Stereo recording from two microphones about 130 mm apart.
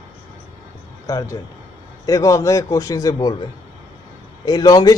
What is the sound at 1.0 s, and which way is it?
A man's voice, 25° left (ahead or behind).